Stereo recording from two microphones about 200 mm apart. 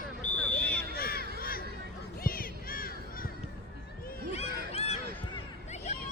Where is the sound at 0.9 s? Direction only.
50° left (ahead or behind).